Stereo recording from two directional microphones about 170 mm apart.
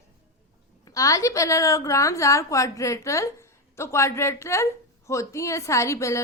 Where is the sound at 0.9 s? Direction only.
20° left (ahead or behind).